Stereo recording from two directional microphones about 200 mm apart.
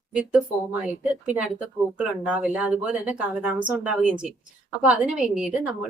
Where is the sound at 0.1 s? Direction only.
5° right (ahead or behind).